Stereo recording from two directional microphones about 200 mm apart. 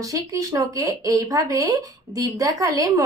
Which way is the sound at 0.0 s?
15° right (ahead or behind).